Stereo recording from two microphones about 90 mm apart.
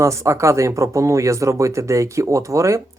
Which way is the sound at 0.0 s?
35° right (ahead or behind).